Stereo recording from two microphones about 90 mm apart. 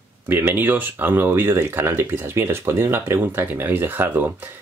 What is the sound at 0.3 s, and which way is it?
Speech, 25° right (ahead or behind).